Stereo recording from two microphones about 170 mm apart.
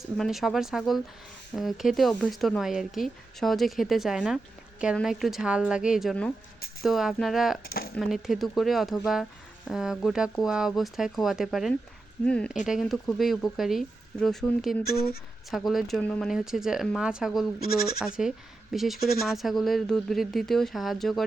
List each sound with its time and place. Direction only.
0.2 s speech: centre (ahead or behind)
7.6 s speech: 60° left (ahead or behind)
7.9 s speech: centre (ahead or behind)
14.8 s speech: 65° left (ahead or behind)
15.4 s speech: centre (ahead or behind)
17.6 s speech: 60° left (ahead or behind)
18.0 s speech: 5° right (ahead or behind)